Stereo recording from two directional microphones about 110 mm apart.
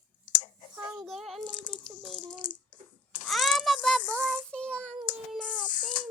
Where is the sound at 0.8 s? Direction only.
30° right (ahead or behind).